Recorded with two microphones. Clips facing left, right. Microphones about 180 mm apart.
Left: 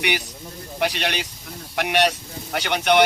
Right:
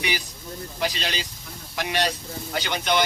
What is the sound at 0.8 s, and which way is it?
Speech, 65° left (ahead or behind).